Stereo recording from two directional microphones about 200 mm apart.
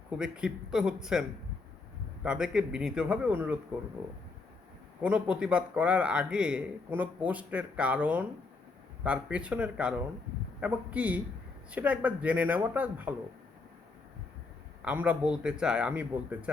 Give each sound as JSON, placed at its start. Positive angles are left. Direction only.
{"t": 0.2, "sound": "a man's voice", "side_deg": -5}
{"t": 2.2, "sound": "a man's voice", "side_deg": -5}
{"t": 5.0, "sound": "a man's voice", "side_deg": -5}
{"t": 14.8, "sound": "a man's voice", "side_deg": -5}